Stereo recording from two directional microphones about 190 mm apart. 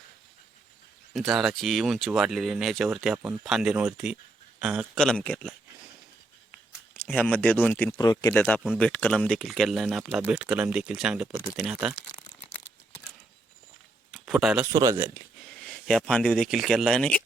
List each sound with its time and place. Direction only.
1.1 s speech: centre (ahead or behind)
6.9 s speech: 10° left (ahead or behind)
8.3 s speech: 5° left (ahead or behind)
14.1 s a sound: centre (ahead or behind)
14.7 s speech: 20° right (ahead or behind)
15.5 s speech: 5° left (ahead or behind)